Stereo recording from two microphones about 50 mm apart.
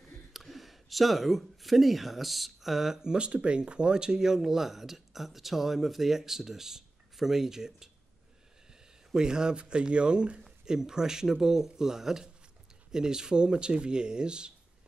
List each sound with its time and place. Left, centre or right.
0.3 s speech: centre
9.1 s speech: centre